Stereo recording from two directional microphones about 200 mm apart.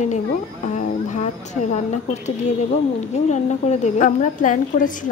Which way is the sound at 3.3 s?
35° left (ahead or behind).